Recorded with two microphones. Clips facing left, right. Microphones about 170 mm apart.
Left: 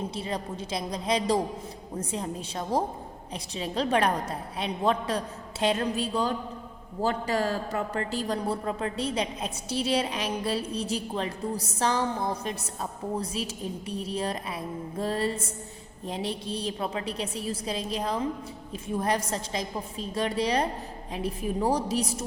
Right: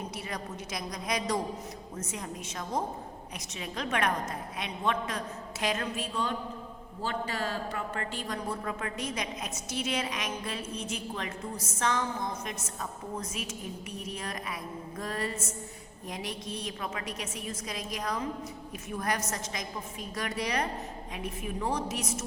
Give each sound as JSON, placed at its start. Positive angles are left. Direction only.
{"t": 0.0, "sound": "a woman's voice", "side_deg": 30}